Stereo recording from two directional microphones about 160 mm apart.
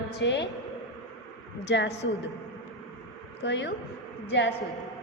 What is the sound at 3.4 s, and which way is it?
A woman's voice, 90° left.